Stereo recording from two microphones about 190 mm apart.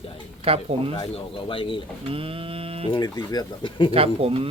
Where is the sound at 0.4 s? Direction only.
30° right (ahead or behind).